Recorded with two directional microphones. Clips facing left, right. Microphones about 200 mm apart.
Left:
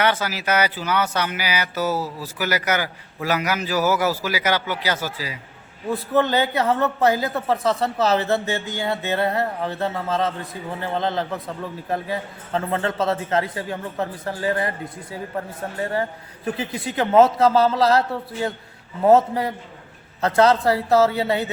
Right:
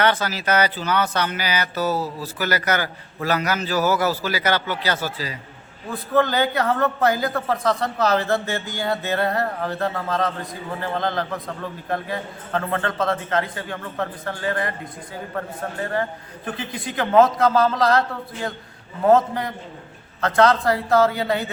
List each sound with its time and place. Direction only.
0.0 s speech: 10° left (ahead or behind)
5.9 s speech: 25° left (ahead or behind)
7.3 s speech: 5° left (ahead or behind)
7.8 s a man's voice: 25° left (ahead or behind)
15.8 s a man's voice: 30° left (ahead or behind)